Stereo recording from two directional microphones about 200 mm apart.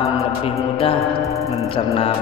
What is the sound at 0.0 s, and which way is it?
Music, 30° left (ahead or behind).